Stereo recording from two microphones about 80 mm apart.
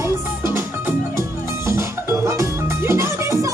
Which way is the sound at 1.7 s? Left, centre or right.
Right.